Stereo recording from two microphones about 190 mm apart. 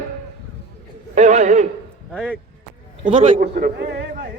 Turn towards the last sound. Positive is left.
turn(degrees=-60)  # may be behind; listen again after turning